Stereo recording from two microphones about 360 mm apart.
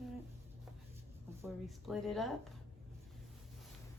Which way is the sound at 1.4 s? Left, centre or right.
Centre.